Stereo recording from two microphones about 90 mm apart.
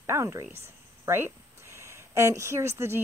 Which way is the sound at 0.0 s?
30° right (ahead or behind).